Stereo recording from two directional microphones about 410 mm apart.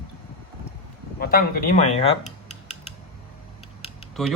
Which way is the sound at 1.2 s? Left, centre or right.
Left.